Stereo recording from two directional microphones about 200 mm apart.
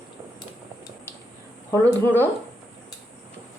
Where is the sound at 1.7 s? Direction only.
10° left (ahead or behind).